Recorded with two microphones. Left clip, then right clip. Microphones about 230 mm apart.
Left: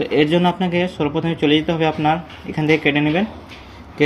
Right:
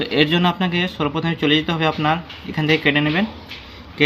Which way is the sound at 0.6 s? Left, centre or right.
Right.